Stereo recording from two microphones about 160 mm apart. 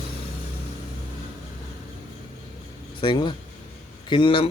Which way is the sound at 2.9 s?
30° left (ahead or behind).